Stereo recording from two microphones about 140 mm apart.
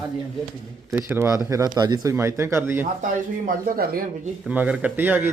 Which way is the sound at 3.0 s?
90° right.